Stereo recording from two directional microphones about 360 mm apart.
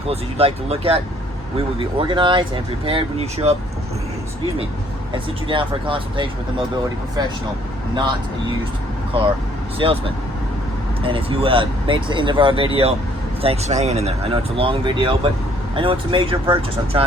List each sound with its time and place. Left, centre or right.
0.1 s speech: centre
5.1 s speech: centre
9.7 s speech: centre